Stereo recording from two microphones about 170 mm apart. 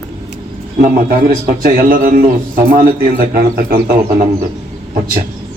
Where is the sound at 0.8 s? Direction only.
50° right (ahead or behind).